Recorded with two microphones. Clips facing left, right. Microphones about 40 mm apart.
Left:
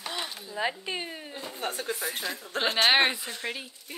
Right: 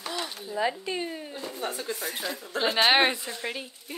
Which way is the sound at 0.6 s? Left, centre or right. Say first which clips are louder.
Right 2 dB; left.